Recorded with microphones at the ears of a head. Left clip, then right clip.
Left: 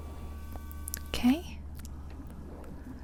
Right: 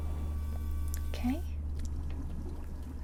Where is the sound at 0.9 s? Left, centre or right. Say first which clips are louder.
Left 8 dB; left.